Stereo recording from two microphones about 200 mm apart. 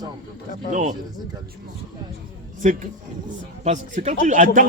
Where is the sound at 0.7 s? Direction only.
40° right (ahead or behind).